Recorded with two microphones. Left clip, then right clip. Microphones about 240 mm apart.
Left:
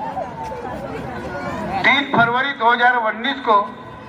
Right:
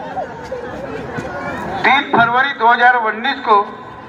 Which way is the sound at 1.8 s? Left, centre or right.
Left.